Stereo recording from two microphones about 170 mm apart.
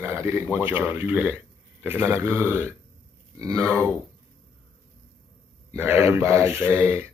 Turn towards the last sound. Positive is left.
turn(degrees=-15)  # may be behind; listen again after turning